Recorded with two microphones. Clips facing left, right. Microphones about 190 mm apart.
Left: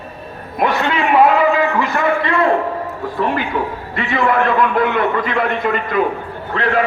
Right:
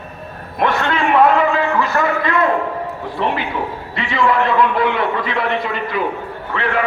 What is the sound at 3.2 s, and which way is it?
A man's voice, 45° left (ahead or behind).